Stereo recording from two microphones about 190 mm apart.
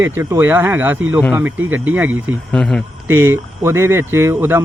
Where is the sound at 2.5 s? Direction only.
5° left (ahead or behind).